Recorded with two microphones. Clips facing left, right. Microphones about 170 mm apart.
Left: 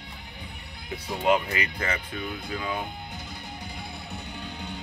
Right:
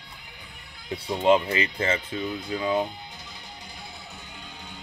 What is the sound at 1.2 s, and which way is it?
Speech, 25° right (ahead or behind).